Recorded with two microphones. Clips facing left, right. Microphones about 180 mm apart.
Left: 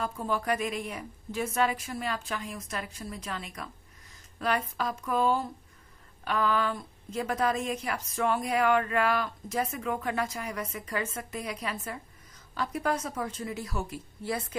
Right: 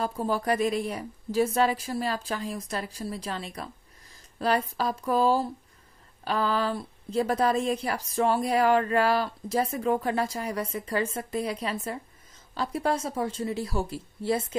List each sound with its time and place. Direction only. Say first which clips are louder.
0.0 s a woman's voice: right 3 dB; 35° right (ahead or behind)